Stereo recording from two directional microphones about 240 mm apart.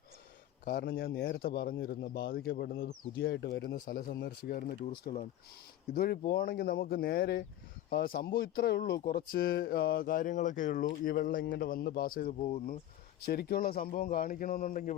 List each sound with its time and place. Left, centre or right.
0.6 s speech: left
12.4 s speech: left
13.2 s speech: left